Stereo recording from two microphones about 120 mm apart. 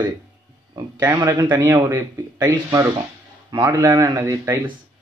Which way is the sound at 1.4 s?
40° right (ahead or behind).